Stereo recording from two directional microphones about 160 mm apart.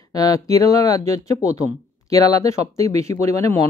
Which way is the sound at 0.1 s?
20° left (ahead or behind).